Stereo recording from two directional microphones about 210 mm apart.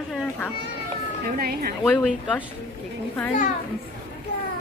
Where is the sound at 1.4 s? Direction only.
45° right (ahead or behind).